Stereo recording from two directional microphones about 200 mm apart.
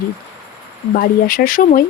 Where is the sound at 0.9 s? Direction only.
45° left (ahead or behind).